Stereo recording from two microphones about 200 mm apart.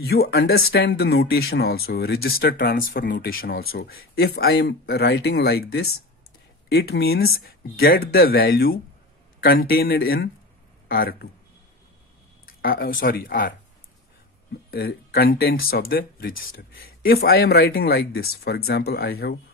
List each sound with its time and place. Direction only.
0.0 s speech: 50° left (ahead or behind)
12.4 s speech: 45° left (ahead or behind)
14.7 s speech: 50° left (ahead or behind)